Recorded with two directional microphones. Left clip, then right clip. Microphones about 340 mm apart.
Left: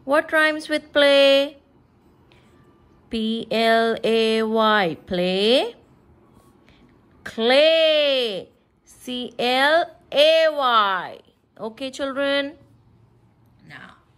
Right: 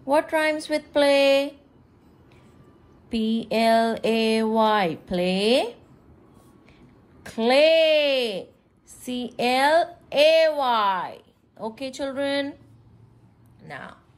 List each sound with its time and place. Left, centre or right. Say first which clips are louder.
0.1 s a woman's voice: left 3 dB; left
3.1 s a woman's voice: left 1 dB; centre
7.2 s a woman's voice: left 2 dB; centre
13.6 s speech: right 4 dB; centre